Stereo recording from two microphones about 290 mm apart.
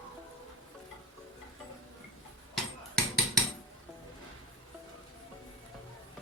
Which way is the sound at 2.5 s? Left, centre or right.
Centre.